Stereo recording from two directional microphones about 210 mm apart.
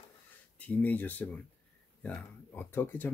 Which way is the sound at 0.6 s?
5° left (ahead or behind).